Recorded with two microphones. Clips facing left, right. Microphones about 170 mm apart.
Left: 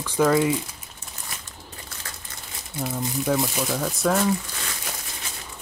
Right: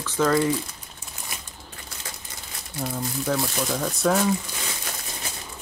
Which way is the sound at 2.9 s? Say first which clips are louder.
Left 3 dB; 15° left (ahead or behind).